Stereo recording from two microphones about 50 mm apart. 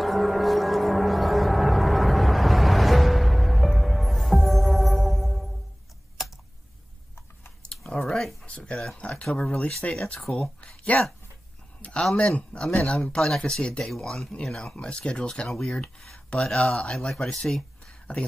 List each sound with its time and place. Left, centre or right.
0.0 s gong: centre
7.8 s a sound: centre
8.5 s a sound: left
9.2 s speech: left
10.1 s speech: centre
11.8 s a sound: left
12.2 s speech: left
13.8 s speech: centre
14.3 s speech: centre
15.4 s speech: centre